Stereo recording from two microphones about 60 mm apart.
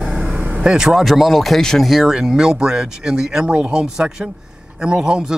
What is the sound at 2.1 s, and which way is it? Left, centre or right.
Speech, centre.